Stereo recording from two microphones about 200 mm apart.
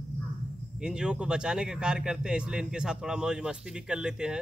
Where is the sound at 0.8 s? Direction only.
5° right (ahead or behind).